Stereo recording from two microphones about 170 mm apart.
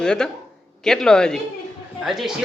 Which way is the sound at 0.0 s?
5° left (ahead or behind).